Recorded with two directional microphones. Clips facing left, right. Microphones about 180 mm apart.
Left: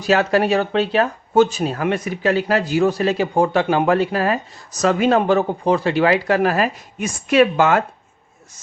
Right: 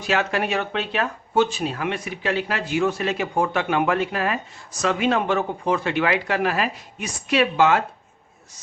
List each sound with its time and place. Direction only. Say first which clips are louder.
0.0 s speech: left 7 dB; 35° left (ahead or behind)